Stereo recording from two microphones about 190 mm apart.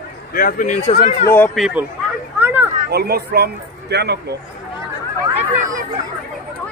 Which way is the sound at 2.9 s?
55° right (ahead or behind).